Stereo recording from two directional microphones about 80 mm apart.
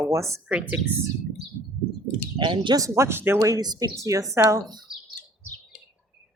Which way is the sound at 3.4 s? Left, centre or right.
Right.